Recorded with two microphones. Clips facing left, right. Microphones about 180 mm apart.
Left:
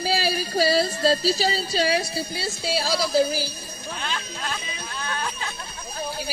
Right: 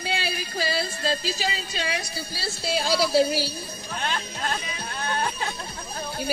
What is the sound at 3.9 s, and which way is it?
Music, 50° right (ahead or behind).